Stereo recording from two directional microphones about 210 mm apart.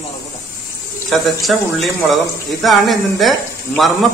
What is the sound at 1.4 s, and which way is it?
Speech, centre (ahead or behind).